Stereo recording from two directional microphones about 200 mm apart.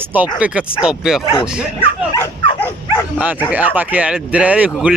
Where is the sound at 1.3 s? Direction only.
20° left (ahead or behind).